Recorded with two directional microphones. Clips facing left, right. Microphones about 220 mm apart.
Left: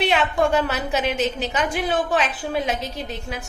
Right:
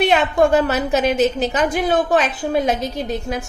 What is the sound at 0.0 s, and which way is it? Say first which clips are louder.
A woman's voice: right 5 dB; 45° right (ahead or behind).